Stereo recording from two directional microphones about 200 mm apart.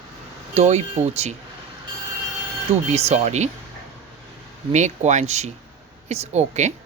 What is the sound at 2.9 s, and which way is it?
Speech, 30° right (ahead or behind).